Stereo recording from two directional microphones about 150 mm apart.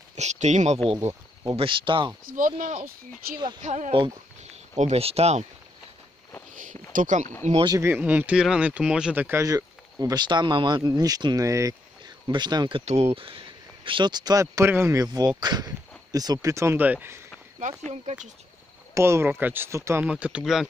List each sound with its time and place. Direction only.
0.1 s speech: 50° right (ahead or behind)
1.4 s speech: 30° right (ahead or behind)
2.2 s speech: 65° right (ahead or behind)
3.6 s speech: 55° right (ahead or behind)
6.5 s speech: 60° right (ahead or behind)
7.6 s speech: 25° right (ahead or behind)
7.9 s speech: 10° right (ahead or behind); by 12.8 s 30° right (ahead or behind)
12.8 s speech: 45° right (ahead or behind); by 17.2 s 10° right (ahead or behind)
18.0 s speech: 55° right (ahead or behind)
18.9 s speech: 20° right (ahead or behind)